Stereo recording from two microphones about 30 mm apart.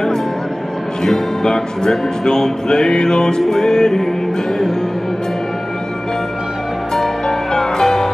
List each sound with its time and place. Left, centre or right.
1.0 s speech: centre
7.2 s music: centre